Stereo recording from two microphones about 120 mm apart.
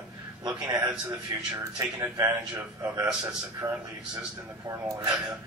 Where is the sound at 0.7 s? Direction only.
25° right (ahead or behind).